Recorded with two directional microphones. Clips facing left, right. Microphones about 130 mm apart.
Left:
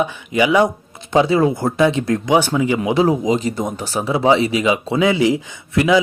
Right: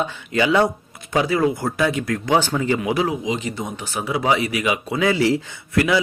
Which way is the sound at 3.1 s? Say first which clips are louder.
Left 7 dB; 40° left (ahead or behind).